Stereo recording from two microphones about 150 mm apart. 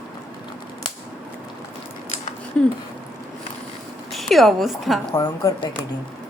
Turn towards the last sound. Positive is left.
turn(degrees=25)  # may be behind; listen again after turning